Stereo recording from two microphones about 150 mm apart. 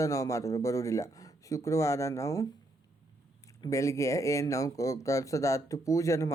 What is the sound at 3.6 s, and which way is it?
Speech, 20° left (ahead or behind).